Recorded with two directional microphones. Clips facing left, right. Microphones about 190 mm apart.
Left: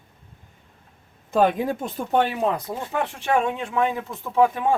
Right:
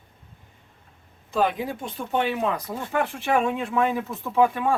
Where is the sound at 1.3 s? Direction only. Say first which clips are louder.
Left 4 dB; 50° left (ahead or behind).